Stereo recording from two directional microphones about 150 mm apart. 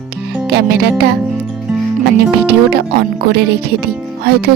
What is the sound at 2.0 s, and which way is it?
Speech, 90° right.